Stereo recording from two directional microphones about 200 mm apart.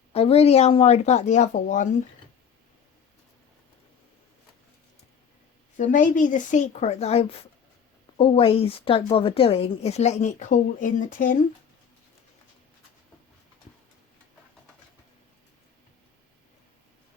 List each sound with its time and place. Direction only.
0.1 s a woman's voice: 30° left (ahead or behind)
5.7 s a woman's voice: 40° left (ahead or behind)